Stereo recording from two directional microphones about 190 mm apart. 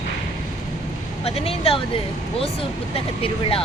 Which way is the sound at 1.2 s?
30° left (ahead or behind).